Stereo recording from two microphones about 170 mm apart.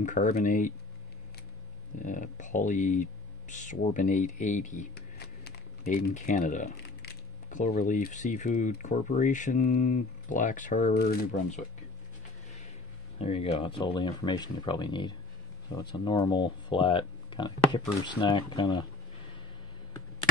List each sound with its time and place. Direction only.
0.0 s speech: 45° left (ahead or behind)
2.0 s speech: 45° left (ahead or behind)
4.9 s a sound: 70° left (ahead or behind)
5.9 s speech: 45° left (ahead or behind)
13.2 s speech: 35° left (ahead or behind)